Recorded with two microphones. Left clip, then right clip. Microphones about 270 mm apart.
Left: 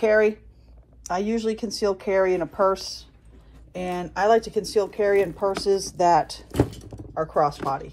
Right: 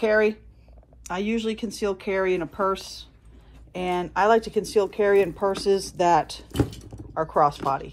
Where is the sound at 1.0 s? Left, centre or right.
Right.